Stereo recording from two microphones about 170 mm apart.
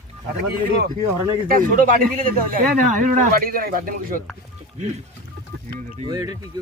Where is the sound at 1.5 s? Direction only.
55° right (ahead or behind).